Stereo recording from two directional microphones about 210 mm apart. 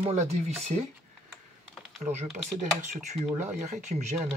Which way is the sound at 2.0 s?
30° right (ahead or behind).